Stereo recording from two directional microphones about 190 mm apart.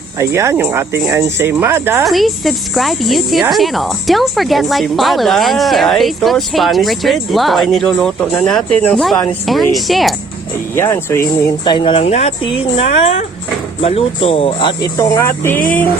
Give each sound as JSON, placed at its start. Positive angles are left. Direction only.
{"t": 0.2, "sound": "speech", "side_deg": -15}
{"t": 2.0, "sound": "a woman's voice", "side_deg": 0}
{"t": 10.8, "sound": "speech", "side_deg": 15}
{"t": 11.6, "sound": "speech", "side_deg": 25}